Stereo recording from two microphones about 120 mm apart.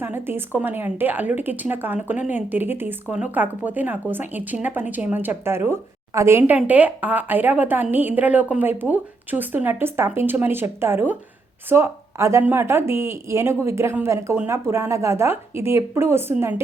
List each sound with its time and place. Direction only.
0.0 s a woman's voice: 15° right (ahead or behind)
6.6 s a woman's voice: 10° right (ahead or behind)